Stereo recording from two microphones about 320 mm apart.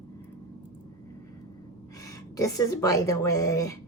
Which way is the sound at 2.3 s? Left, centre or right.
Centre.